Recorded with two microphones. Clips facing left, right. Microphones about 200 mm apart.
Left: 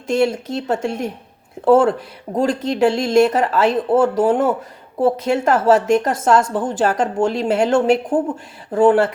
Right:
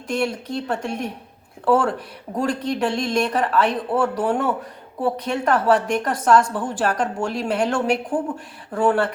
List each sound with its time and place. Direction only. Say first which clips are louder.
0.1 s a woman's voice: left 6 dB; 25° left (ahead or behind)